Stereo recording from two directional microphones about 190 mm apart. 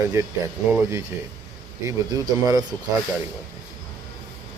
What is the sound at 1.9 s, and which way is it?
Speech, 20° right (ahead or behind).